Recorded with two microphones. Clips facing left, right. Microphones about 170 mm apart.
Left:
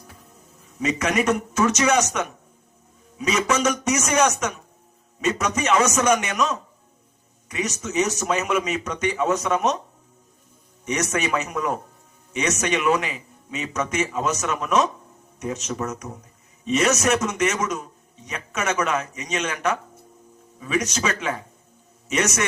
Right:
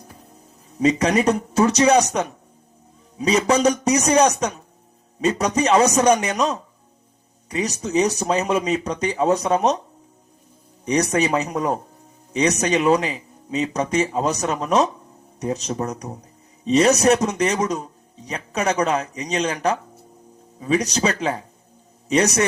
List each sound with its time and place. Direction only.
0.8 s a man's voice: 35° right (ahead or behind)
10.8 s a man's voice: 35° right (ahead or behind)